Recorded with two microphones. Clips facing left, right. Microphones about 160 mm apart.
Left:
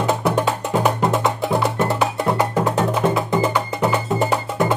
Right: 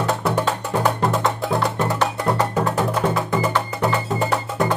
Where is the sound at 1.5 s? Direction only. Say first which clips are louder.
Left 2 dB; centre (ahead or behind).